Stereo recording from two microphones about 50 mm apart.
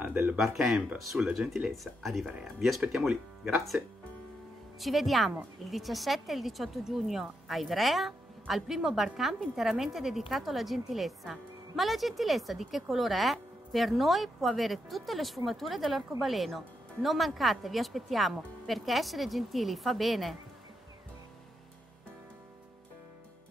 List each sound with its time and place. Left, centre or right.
0.0 s speech: right
0.6 s speech: centre
1.8 s speech: centre
4.7 s speech: centre